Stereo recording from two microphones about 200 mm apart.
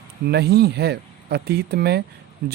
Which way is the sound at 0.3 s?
55° right (ahead or behind).